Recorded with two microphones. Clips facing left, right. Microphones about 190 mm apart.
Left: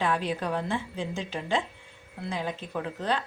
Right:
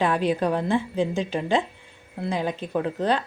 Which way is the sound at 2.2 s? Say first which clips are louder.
Right 6 dB; 75° right (ahead or behind).